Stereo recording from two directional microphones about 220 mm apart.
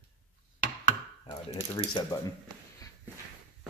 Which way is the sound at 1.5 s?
15° left (ahead or behind).